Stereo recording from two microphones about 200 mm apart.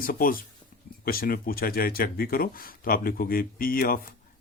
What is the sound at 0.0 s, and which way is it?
Speech, 45° left (ahead or behind).